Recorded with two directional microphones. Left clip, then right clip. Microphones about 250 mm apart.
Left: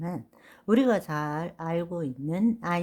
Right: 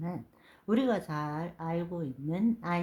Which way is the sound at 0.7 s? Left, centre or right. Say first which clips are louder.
Left 6 dB; left.